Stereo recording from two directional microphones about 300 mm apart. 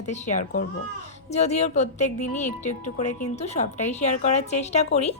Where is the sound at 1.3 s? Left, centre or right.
Left.